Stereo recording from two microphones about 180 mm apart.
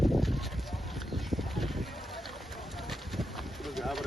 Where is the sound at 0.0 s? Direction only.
Centre (ahead or behind).